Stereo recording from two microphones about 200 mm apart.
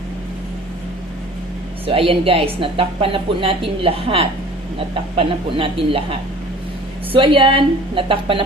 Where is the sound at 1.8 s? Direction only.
25° right (ahead or behind).